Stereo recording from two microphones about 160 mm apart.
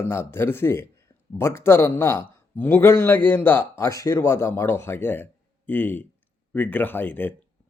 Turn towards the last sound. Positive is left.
turn(degrees=10)  # may be behind; listen again after turning